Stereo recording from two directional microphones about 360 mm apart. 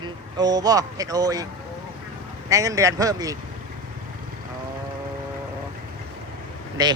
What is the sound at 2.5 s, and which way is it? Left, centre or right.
Speech, centre.